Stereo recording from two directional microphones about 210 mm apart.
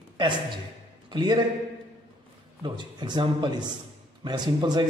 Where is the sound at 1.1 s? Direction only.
20° right (ahead or behind).